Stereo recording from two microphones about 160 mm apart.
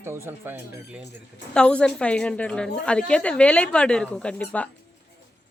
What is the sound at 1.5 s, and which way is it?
A woman's voice, 5° left (ahead or behind).